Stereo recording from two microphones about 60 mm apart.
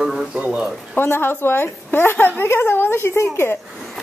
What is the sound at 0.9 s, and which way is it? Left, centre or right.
A woman's voice, left.